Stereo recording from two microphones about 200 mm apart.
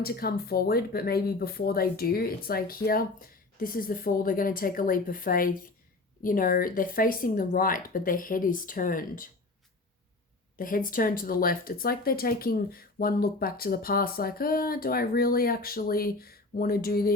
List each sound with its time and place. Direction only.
0.0 s speech: 50° left (ahead or behind)
10.6 s speech: 45° left (ahead or behind)